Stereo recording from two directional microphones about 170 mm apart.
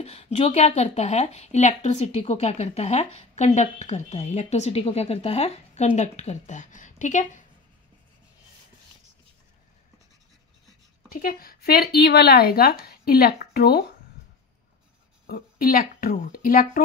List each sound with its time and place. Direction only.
0.0 s speech: 35° left (ahead or behind)
11.1 s speech: 60° left (ahead or behind)
15.2 s a woman's voice: 60° left (ahead or behind)